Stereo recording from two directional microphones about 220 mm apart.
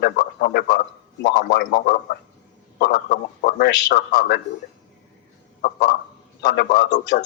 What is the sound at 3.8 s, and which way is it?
Speech, 45° left (ahead or behind).